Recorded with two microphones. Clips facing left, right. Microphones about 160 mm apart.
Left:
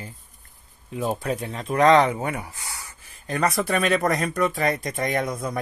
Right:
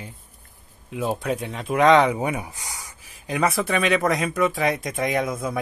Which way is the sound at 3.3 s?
Centre (ahead or behind).